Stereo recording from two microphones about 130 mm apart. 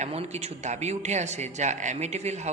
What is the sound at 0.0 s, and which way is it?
Speech, 55° right (ahead or behind).